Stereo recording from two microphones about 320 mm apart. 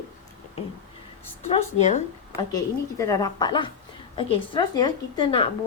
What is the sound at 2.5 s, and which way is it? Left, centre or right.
Speech, centre.